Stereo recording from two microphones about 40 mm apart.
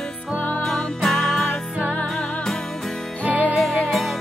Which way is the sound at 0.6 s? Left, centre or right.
Centre.